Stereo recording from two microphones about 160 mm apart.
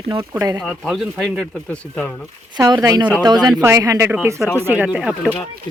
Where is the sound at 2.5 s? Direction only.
25° right (ahead or behind); by 5.3 s 10° right (ahead or behind).